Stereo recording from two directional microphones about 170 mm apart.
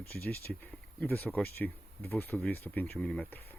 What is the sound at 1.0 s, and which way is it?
Speech, 10° left (ahead or behind).